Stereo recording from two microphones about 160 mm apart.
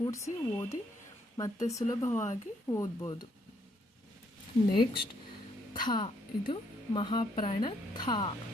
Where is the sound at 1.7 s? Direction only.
20° left (ahead or behind).